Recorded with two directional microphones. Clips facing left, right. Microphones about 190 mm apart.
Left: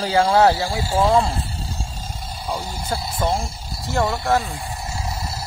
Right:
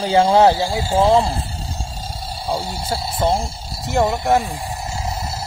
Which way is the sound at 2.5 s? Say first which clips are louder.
Right 3 dB; 30° right (ahead or behind).